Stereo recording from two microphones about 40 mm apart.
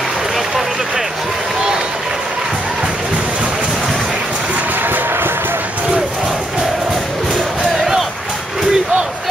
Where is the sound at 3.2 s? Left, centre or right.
Right.